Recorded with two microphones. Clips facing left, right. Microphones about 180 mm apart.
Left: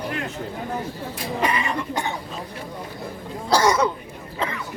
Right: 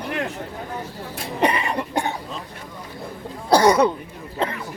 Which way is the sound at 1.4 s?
65° right (ahead or behind).